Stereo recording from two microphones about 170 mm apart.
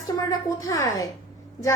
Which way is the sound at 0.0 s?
20° left (ahead or behind).